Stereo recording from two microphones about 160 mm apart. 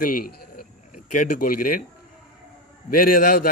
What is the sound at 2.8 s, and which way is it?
Speech, 65° left (ahead or behind).